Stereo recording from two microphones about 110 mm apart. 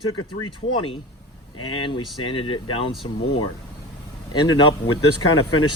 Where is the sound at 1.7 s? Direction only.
50° left (ahead or behind).